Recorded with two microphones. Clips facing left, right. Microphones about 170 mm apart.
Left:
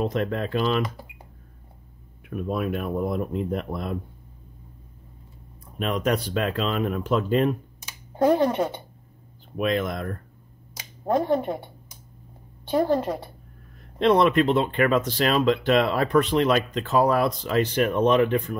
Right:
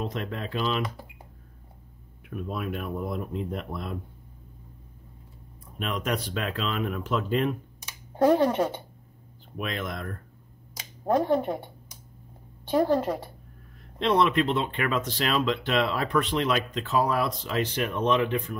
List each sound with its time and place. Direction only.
0.0 s speech: 50° left (ahead or behind)
2.4 s speech: 45° left (ahead or behind)
5.8 s speech: 40° left (ahead or behind)
8.2 s speech: 15° left (ahead or behind)
9.6 s speech: 40° left (ahead or behind)
11.1 s speech: 15° left (ahead or behind)
12.7 s speech: 15° left (ahead or behind)
13.9 s speech: 45° left (ahead or behind)